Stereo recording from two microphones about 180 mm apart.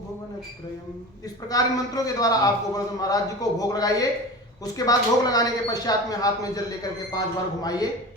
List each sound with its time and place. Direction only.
1.5 s speech: 20° left (ahead or behind)